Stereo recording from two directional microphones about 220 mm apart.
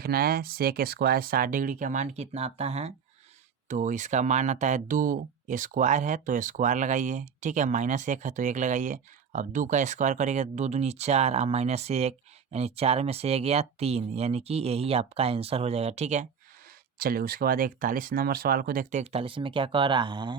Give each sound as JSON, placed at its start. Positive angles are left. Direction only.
{"t": 0.0, "sound": "speech", "side_deg": -40}
{"t": 17.0, "sound": "speech", "side_deg": -40}